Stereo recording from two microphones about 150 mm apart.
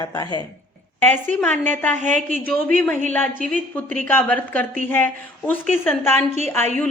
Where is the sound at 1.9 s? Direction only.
55° right (ahead or behind).